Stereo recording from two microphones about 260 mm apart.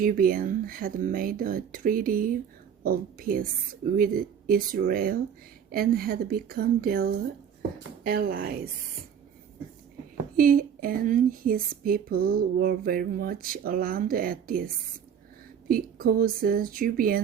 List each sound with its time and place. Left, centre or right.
0.0 s speech: right
10.3 s speech: right
15.7 s speech: right